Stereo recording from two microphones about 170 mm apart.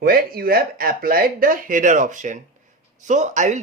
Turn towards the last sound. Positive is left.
turn(degrees=-45)  # may be behind; listen again after turning